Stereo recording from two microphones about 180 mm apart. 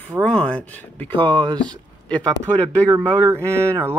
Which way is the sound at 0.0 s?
5° left (ahead or behind).